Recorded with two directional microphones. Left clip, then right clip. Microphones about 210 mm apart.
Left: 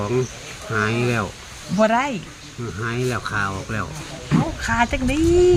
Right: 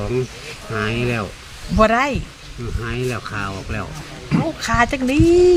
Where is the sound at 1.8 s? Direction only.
50° right (ahead or behind).